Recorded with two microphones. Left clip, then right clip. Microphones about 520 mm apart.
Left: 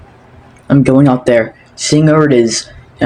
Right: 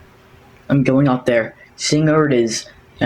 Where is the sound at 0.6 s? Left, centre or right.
Right.